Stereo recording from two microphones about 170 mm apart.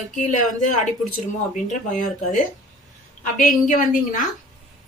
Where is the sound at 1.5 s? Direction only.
50° left (ahead or behind).